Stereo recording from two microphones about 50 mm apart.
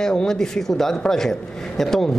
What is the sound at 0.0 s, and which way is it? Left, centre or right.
Speech, centre.